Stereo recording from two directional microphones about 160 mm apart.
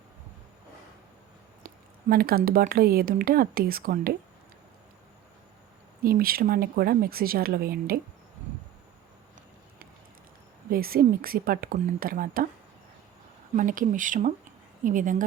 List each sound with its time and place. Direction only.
1.6 s speech: 65° right (ahead or behind)
6.0 s speech: 65° right (ahead or behind)
10.7 s a woman's voice: 70° right (ahead or behind)
13.6 s a woman's voice: 55° right (ahead or behind)